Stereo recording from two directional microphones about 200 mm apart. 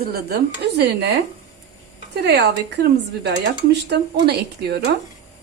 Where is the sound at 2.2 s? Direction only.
55° right (ahead or behind).